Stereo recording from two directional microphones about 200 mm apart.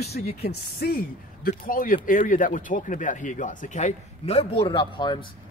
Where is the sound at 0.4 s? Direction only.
50° left (ahead or behind).